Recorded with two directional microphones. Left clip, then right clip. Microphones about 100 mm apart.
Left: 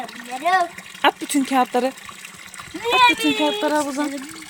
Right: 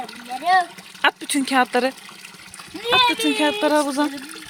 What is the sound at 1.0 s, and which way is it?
Speech, 10° left (ahead or behind).